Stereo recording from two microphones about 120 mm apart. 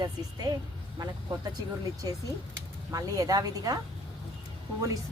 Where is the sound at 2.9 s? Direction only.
30° right (ahead or behind).